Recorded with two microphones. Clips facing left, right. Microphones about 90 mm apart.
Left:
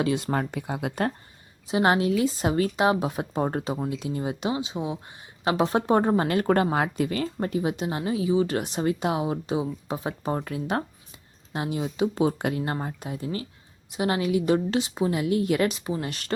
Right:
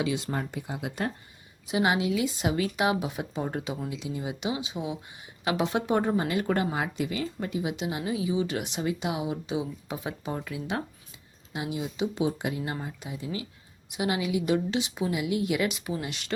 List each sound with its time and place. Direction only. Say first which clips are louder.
0.0 s speech: left 4 dB; 50° left (ahead or behind)
1.6 s speech: left 4 dB; 40° left (ahead or behind)
6.1 s speech: left 5 dB; 55° left (ahead or behind)